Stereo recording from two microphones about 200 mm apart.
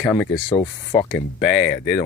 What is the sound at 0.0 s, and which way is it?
Speech, 5° left (ahead or behind).